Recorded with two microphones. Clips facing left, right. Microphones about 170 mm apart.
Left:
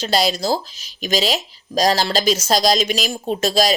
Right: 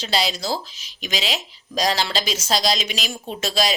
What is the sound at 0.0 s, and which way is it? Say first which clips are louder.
Speech: left 5 dB; 45° left (ahead or behind).